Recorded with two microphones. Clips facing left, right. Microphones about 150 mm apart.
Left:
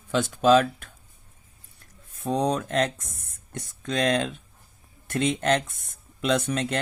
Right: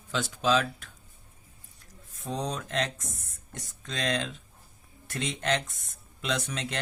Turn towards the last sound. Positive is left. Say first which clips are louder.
# left 8 dB
turn(degrees=50)  # may be behind; listen again after turning